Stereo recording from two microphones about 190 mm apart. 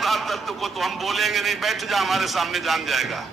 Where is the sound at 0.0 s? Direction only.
Centre (ahead or behind).